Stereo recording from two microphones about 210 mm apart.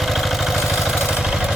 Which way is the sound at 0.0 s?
Centre (ahead or behind).